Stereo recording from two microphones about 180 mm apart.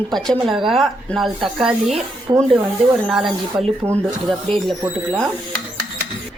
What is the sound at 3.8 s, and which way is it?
Speech, 15° right (ahead or behind).